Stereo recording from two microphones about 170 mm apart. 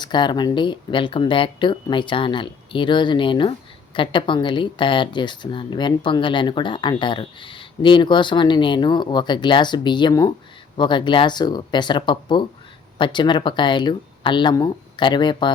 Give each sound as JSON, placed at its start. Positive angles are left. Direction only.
{"t": 0.0, "sound": "speech", "side_deg": 25}